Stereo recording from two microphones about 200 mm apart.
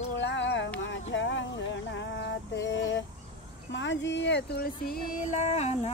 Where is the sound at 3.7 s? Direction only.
65° left (ahead or behind).